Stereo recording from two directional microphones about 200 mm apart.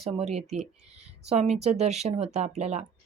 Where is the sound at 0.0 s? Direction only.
30° right (ahead or behind).